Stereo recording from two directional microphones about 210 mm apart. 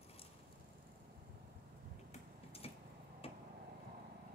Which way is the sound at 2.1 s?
30° left (ahead or behind).